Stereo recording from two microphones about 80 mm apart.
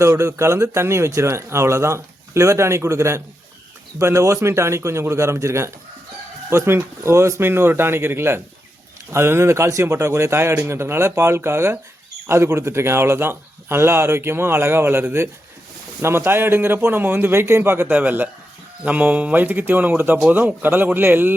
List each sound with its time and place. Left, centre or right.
0.0 s a man's voice: right